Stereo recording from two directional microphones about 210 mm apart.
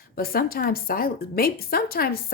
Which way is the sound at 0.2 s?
45° left (ahead or behind).